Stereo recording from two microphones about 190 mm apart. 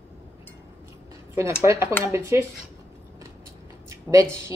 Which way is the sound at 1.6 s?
15° right (ahead or behind).